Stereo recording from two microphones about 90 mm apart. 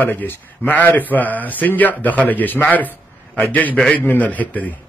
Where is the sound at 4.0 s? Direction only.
20° left (ahead or behind).